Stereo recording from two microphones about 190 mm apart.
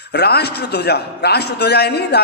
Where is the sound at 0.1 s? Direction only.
60° left (ahead or behind).